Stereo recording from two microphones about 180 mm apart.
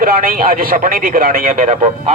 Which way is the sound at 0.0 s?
55° right (ahead or behind).